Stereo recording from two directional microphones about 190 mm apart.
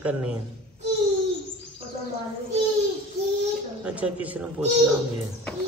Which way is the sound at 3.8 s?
5° right (ahead or behind).